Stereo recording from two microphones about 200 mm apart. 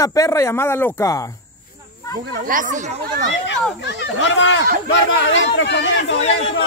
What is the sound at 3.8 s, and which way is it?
Speech, 65° left (ahead or behind).